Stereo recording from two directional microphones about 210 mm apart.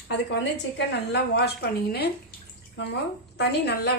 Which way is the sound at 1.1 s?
55° left (ahead or behind).